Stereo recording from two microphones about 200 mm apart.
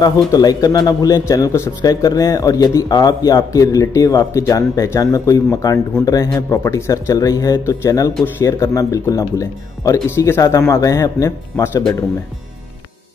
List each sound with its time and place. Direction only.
0.0 s a man's voice: 20° left (ahead or behind)